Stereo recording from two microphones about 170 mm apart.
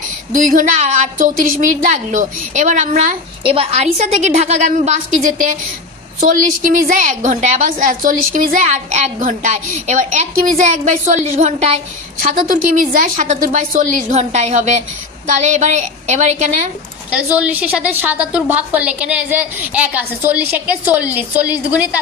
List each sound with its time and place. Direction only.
0.3 s a woman's voice: 50° right (ahead or behind)
6.9 s a woman's voice: 45° right (ahead or behind)
17.1 s a woman's voice: 10° right (ahead or behind)